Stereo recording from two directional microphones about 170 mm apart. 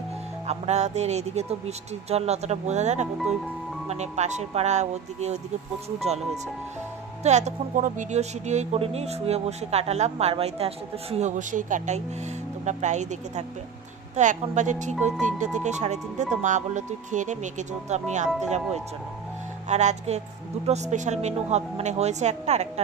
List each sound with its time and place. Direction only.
0.5 s speech: 40° right (ahead or behind)
19.7 s speech: 40° right (ahead or behind)